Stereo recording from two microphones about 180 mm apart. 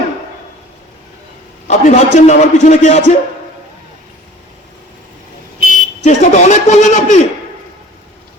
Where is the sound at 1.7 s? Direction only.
40° left (ahead or behind).